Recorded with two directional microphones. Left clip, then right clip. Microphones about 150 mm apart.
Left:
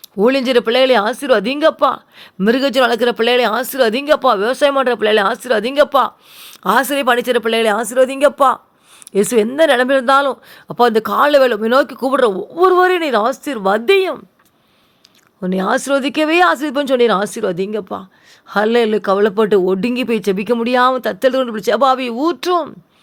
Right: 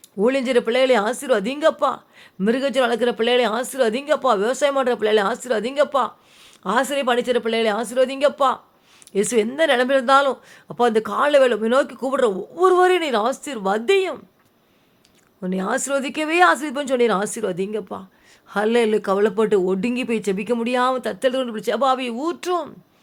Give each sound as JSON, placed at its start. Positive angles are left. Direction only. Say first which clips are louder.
{"t": 0.2, "sound": "speech", "louder": "left 5 dB", "side_deg": 30}
{"t": 15.4, "sound": "speech", "louder": "left 7 dB", "side_deg": 35}